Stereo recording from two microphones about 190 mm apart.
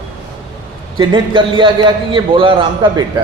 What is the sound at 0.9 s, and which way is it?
A man's voice, 25° right (ahead or behind).